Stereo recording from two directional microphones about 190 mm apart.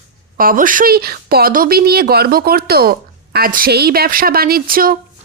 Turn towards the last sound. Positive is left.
turn(degrees=-50)  # may be behind; listen again after turning